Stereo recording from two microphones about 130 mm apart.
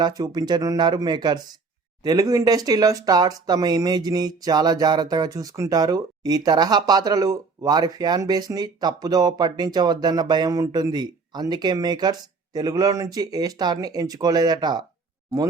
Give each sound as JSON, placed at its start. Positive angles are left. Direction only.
{"t": 0.0, "sound": "speech", "side_deg": -30}